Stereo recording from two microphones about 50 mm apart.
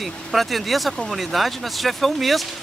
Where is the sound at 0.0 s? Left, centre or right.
Centre.